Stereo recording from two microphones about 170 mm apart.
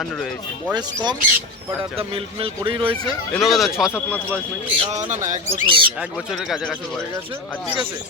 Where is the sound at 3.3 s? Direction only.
Centre (ahead or behind).